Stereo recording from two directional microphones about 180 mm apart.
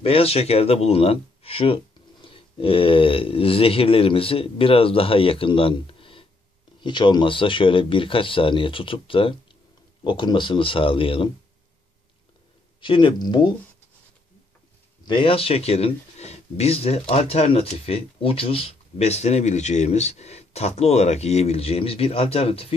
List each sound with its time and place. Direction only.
0.0 s speech: 35° left (ahead or behind)
12.8 s speech: 30° left (ahead or behind)
15.0 s speech: 30° left (ahead or behind)